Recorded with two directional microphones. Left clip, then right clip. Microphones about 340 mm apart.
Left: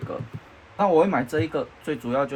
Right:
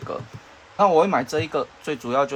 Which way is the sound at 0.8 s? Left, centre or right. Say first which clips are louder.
Right 2 dB; centre.